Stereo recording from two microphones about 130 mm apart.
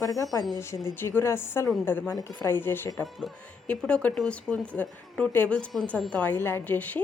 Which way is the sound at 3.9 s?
10° left (ahead or behind).